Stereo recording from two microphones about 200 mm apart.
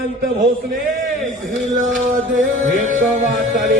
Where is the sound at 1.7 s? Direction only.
40° right (ahead or behind).